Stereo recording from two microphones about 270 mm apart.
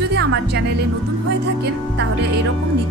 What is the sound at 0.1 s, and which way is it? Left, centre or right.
Music, right.